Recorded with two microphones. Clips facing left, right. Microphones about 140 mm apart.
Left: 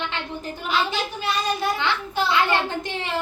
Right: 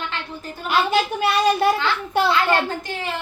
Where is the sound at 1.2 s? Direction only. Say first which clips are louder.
Right 6 dB; 60° right (ahead or behind).